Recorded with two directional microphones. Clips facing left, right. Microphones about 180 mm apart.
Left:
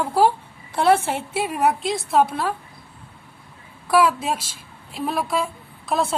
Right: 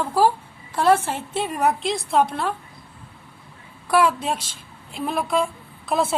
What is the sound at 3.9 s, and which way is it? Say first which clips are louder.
A woman's voice: left 1 dB; 5° left (ahead or behind).